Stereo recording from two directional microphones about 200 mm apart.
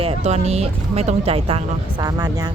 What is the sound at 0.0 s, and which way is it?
Speech, 30° right (ahead or behind).